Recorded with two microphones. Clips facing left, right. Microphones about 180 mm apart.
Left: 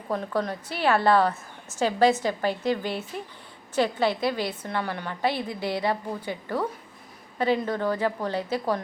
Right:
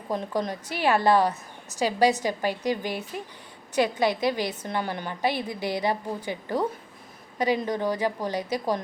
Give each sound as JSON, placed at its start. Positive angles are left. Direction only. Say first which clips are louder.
{"t": 0.1, "sound": "a woman's voice", "louder": "even", "side_deg": -15}